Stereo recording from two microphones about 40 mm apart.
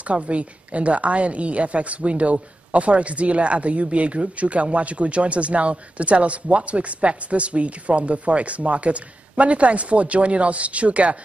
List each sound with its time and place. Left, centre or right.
0.0 s a woman's voice: right